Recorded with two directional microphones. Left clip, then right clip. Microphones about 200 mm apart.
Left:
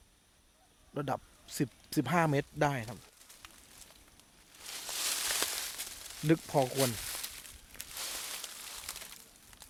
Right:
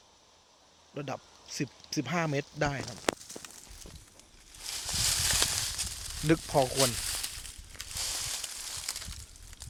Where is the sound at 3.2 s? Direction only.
55° right (ahead or behind).